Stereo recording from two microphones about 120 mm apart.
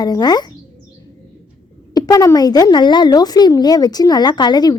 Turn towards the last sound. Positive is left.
turn(degrees=35)  # may be behind; listen again after turning